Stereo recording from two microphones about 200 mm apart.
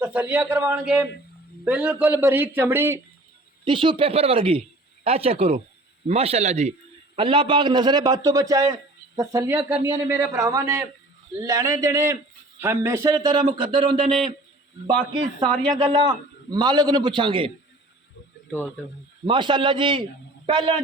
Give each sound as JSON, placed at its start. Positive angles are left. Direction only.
{"t": 0.0, "sound": "a man's voice", "side_deg": -10}
{"t": 3.6, "sound": "a man's voice", "side_deg": -25}
{"t": 19.2, "sound": "a man's voice", "side_deg": -25}